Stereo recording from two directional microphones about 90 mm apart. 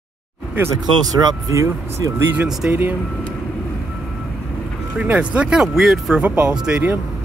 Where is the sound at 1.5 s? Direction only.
35° right (ahead or behind).